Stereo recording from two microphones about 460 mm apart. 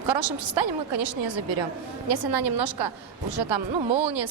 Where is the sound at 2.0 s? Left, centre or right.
Right.